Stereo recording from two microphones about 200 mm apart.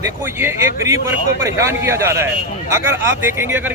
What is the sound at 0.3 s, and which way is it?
A man's voice, 15° right (ahead or behind).